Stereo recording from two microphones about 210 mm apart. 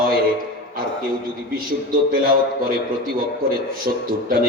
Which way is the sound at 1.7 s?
45° right (ahead or behind).